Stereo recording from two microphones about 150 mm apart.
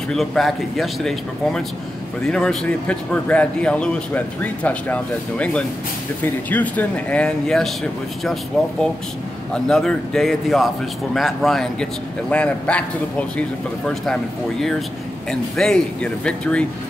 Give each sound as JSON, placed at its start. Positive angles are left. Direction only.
{"t": 0.1, "sound": "speech", "side_deg": 0}
{"t": 9.5, "sound": "speech", "side_deg": 5}